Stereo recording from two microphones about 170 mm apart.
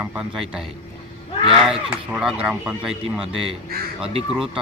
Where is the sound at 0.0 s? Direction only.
5° right (ahead or behind).